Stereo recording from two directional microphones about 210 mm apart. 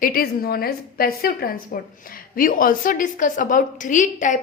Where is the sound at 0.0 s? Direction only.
45° left (ahead or behind).